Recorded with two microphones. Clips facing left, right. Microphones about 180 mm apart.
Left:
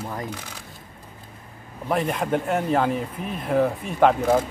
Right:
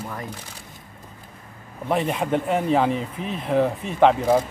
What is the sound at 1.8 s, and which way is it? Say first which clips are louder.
Speech: right 1 dB; 5° right (ahead or behind).